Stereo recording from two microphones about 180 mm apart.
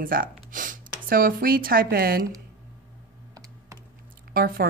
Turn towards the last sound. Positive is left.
turn(degrees=-55)  # may be behind; listen again after turning